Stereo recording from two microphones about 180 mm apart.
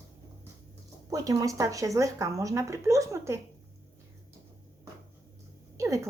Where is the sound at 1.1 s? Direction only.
20° right (ahead or behind).